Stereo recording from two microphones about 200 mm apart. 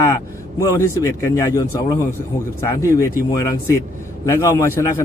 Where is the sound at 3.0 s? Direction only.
15° left (ahead or behind).